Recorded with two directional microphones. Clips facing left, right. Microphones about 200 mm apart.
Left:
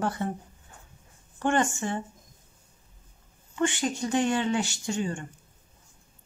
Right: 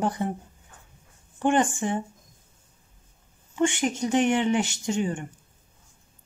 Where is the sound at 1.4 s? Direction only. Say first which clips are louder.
Right 3 dB; 15° right (ahead or behind).